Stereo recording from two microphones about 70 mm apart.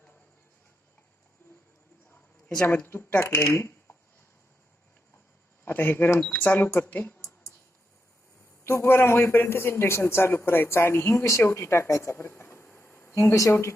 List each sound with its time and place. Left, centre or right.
2.6 s a woman's voice: left
5.6 s a man's voice: left
8.6 s a man's voice: left